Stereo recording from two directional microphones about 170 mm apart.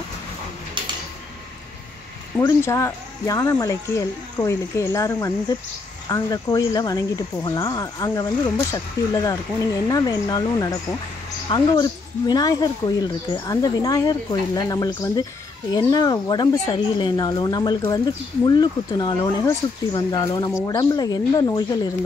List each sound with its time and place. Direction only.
2.4 s speech: 15° left (ahead or behind)